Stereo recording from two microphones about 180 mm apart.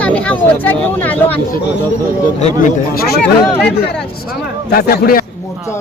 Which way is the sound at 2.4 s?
40° left (ahead or behind).